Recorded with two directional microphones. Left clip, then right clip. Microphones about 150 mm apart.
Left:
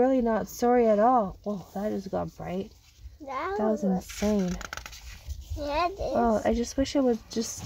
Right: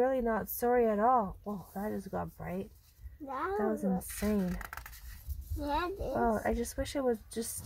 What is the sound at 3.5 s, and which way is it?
Speech, 30° left (ahead or behind).